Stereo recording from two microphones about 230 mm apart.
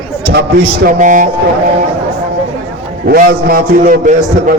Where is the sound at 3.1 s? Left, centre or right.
Right.